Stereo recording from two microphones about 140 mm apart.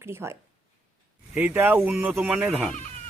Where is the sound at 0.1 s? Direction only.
20° right (ahead or behind).